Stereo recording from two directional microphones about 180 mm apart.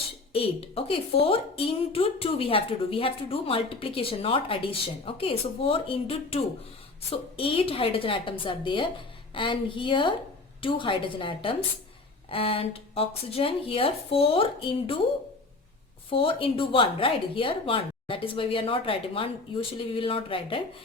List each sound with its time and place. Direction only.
0.3 s a woman's voice: 30° left (ahead or behind)
16.0 s a woman's voice: 30° left (ahead or behind)